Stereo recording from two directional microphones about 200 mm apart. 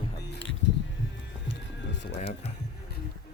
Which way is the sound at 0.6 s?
60° left (ahead or behind).